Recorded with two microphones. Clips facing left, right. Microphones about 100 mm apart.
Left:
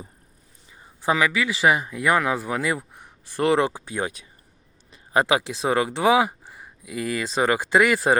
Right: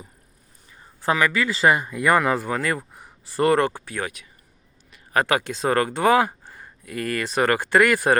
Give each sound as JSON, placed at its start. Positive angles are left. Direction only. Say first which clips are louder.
{"t": 0.7, "sound": "a sound", "louder": "even", "side_deg": 15}
{"t": 1.1, "sound": "speech", "louder": "right 1 dB", "side_deg": 5}
{"t": 2.9, "sound": "speech", "louder": "right 3 dB", "side_deg": -5}
{"t": 3.8, "sound": "speech", "louder": "left 2 dB", "side_deg": 20}
{"t": 5.1, "sound": "speech", "louder": "left 1 dB", "side_deg": 15}